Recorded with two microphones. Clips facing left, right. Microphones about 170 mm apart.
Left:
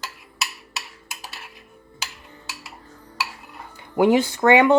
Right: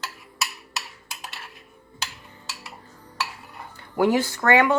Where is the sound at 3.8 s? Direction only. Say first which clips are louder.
Left 3 dB; 20° left (ahead or behind).